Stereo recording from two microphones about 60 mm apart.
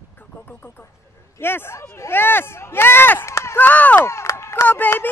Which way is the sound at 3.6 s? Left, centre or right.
Left.